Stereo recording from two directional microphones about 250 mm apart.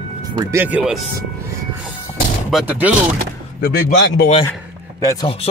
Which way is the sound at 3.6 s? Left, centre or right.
Left.